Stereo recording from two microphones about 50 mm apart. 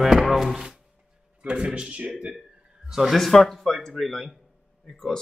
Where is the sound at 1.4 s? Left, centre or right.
Centre.